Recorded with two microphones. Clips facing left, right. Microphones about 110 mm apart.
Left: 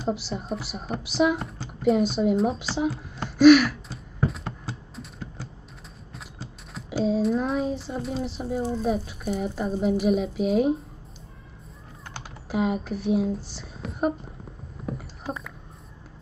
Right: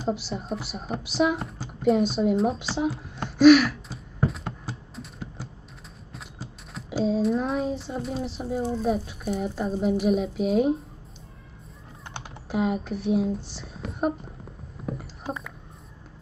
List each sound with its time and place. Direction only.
0.0 s speech: centre (ahead or behind)
4.3 s a sound: centre (ahead or behind)
6.1 s speech: centre (ahead or behind)
12.0 s typing: 25° right (ahead or behind)
12.4 s speech: centre (ahead or behind)
14.8 s a sound: centre (ahead or behind)